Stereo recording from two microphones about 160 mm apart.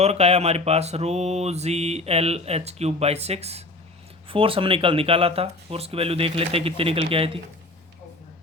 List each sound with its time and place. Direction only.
0.0 s mantra: 40° right (ahead or behind)